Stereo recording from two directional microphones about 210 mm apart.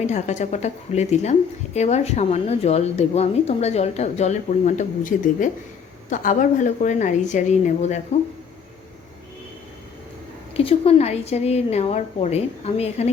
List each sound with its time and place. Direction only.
0.0 s a woman's voice: 35° left (ahead or behind)
10.5 s a woman's voice: 25° left (ahead or behind)